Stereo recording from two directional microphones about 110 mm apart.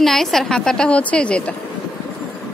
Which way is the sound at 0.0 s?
5° left (ahead or behind).